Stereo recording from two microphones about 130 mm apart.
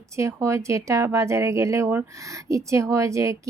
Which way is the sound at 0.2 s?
20° right (ahead or behind).